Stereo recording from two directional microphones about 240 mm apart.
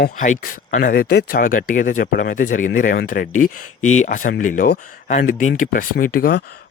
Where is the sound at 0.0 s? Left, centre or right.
Left.